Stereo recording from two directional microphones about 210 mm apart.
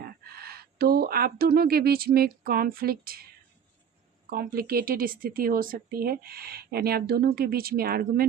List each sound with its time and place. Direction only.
0.0 s speech: 45° right (ahead or behind)
4.3 s speech: 45° right (ahead or behind)